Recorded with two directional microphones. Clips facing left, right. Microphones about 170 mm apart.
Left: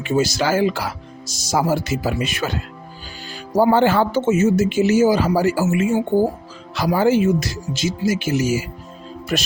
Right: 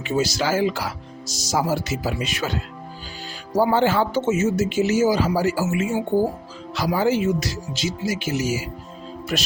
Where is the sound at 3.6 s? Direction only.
55° left (ahead or behind).